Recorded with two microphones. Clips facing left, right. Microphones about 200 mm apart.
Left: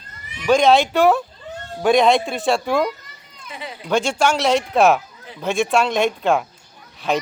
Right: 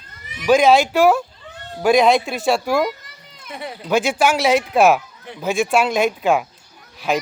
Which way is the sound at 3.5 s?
50° right (ahead or behind).